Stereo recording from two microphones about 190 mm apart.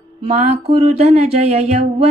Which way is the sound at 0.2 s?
35° right (ahead or behind).